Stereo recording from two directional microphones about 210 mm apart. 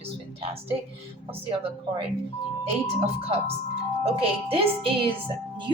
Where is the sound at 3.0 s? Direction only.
30° right (ahead or behind).